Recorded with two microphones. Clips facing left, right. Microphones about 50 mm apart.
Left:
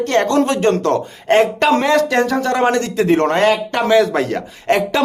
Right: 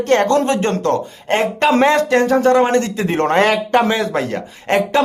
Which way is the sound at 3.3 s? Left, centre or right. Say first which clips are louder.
Even; right.